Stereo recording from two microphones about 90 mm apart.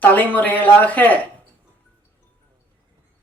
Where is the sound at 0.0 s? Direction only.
20° left (ahead or behind).